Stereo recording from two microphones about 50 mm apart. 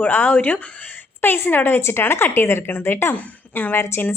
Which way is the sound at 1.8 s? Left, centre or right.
Left.